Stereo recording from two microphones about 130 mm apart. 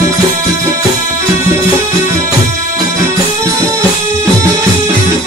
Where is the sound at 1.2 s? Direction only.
20° right (ahead or behind).